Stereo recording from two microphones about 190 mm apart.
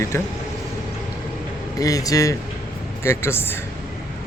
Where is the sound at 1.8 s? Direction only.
20° left (ahead or behind).